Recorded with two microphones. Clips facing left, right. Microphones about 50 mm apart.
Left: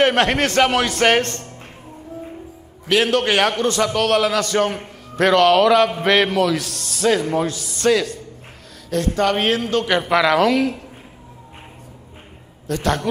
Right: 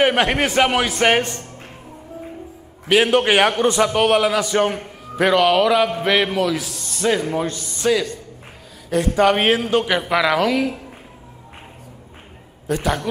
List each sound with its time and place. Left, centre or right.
0.0 s a man's voice: centre
2.9 s a man's voice: centre
9.8 s a man's voice: centre
12.6 s a man's voice: centre